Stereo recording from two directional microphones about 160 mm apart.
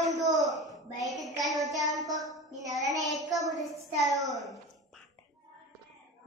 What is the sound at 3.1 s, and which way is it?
A woman's voice, centre (ahead or behind).